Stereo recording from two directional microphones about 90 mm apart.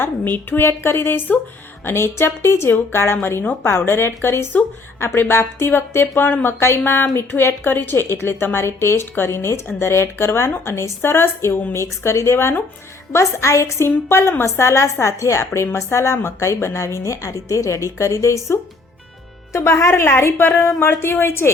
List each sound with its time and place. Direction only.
0.0 s a woman's voice: 25° left (ahead or behind)